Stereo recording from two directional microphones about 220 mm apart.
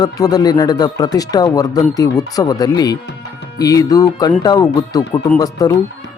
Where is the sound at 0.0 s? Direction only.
15° left (ahead or behind).